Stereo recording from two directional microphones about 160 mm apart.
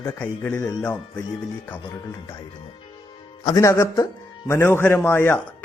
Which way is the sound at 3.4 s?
20° left (ahead or behind).